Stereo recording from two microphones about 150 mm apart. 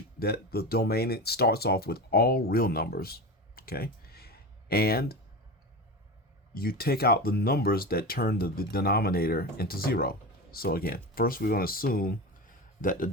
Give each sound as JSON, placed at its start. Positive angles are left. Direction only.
{"t": 0.2, "sound": "speech", "side_deg": 90}
{"t": 6.5, "sound": "a man's voice", "side_deg": 80}